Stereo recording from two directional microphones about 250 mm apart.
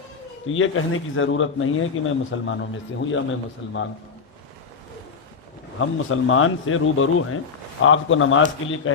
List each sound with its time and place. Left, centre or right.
0.4 s speech: left
5.8 s speech: left